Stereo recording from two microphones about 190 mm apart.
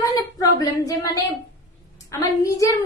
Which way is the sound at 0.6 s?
20° left (ahead or behind).